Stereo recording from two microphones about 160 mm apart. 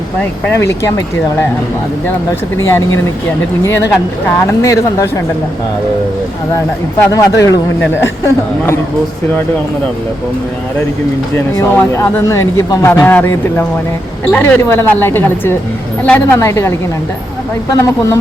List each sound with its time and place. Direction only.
0.2 s a man's voice: 10° left (ahead or behind)
3.6 s a man's voice: 20° left (ahead or behind)
7.1 s a man's voice: 20° left (ahead or behind)
11.5 s a man's voice: 15° left (ahead or behind)
17.7 s speech: 20° left (ahead or behind)